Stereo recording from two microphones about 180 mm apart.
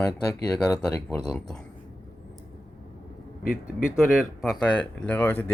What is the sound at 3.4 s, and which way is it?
Speech, 50° left (ahead or behind).